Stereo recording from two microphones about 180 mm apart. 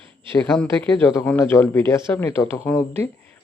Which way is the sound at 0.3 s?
10° left (ahead or behind).